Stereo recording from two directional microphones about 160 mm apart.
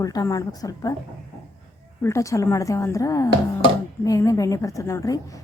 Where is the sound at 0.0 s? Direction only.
20° left (ahead or behind).